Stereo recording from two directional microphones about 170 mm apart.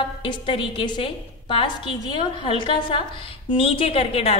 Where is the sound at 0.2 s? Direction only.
30° left (ahead or behind).